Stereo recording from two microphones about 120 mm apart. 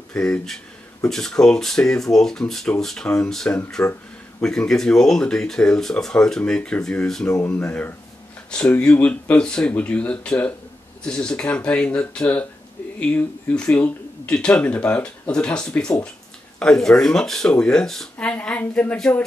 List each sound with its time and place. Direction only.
0.1 s speech: 5° left (ahead or behind)
7.2 s speech: 30° left (ahead or behind)
7.5 s speech: 10° left (ahead or behind)